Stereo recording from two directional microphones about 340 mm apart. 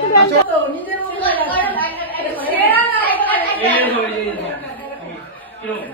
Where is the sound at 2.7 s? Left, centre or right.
Centre.